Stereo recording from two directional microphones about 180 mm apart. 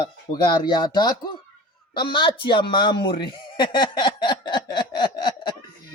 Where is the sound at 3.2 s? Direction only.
25° left (ahead or behind).